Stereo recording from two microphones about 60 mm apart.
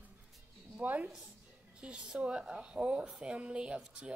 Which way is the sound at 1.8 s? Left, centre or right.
Centre.